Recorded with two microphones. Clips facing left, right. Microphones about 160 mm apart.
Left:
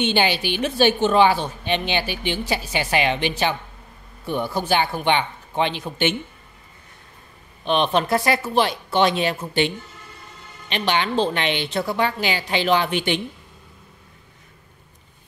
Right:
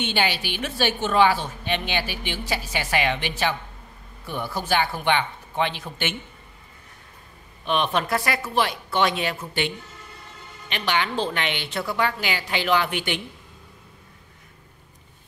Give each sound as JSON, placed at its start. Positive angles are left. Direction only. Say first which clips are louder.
{"t": 0.0, "sound": "a woman's voice", "louder": "left 5 dB", "side_deg": 25}
{"t": 7.6, "sound": "a woman's voice", "louder": "left 4 dB", "side_deg": 25}
{"t": 10.7, "sound": "a woman's voice", "louder": "left 3 dB", "side_deg": 25}